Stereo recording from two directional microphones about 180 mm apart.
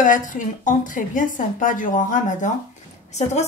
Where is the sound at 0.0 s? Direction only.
45° left (ahead or behind).